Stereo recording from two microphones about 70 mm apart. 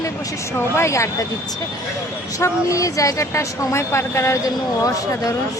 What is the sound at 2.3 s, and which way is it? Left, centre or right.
A woman's voice, left.